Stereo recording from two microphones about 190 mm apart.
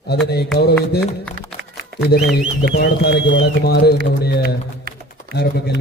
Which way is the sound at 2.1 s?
55° left (ahead or behind).